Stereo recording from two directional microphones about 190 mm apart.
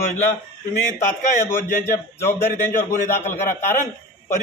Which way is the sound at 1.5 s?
15° left (ahead or behind).